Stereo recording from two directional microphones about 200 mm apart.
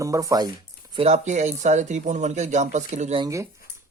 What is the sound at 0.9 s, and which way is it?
Speech, 30° right (ahead or behind).